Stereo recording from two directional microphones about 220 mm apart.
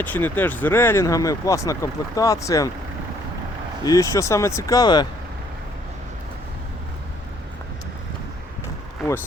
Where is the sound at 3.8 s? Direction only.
15° left (ahead or behind).